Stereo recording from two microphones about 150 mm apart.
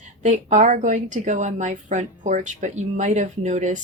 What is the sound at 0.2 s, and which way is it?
Speech, 55° right (ahead or behind).